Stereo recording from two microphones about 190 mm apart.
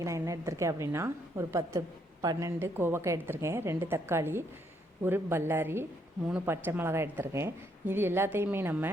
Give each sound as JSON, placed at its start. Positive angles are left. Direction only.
{"t": 0.0, "sound": "a woman's voice", "side_deg": -15}